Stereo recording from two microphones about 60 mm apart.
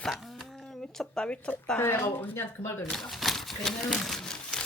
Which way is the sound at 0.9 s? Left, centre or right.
Centre.